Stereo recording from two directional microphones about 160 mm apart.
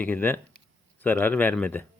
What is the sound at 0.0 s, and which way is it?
Speech, 10° left (ahead or behind).